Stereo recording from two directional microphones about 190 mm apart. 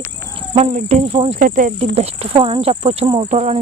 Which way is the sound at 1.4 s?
45° right (ahead or behind).